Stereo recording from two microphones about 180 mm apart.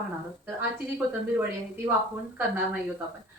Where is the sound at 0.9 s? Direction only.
10° right (ahead or behind).